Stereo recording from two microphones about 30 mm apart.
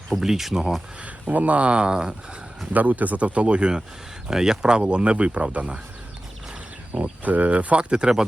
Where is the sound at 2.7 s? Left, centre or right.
Right.